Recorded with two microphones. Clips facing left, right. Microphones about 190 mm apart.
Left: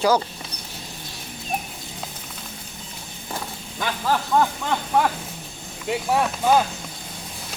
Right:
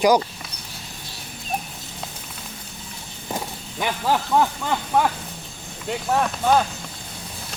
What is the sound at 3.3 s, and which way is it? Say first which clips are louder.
Vehicle: right 2 dB; 15° right (ahead or behind).